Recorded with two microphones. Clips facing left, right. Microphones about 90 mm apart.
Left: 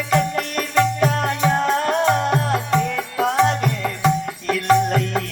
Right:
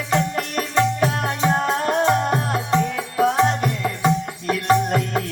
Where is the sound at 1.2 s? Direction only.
30° right (ahead or behind).